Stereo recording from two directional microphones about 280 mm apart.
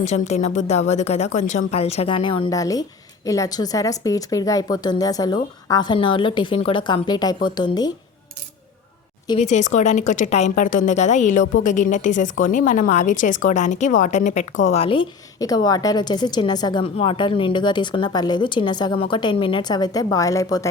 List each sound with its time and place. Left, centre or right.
0.0 s a woman's voice: left
9.2 s a woman's voice: left